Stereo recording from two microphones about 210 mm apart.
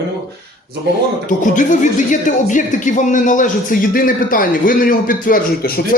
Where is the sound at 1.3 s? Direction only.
40° left (ahead or behind).